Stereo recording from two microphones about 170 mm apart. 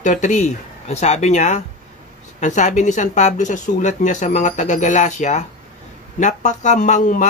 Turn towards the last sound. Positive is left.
turn(degrees=50)  # may be behind; listen again after turning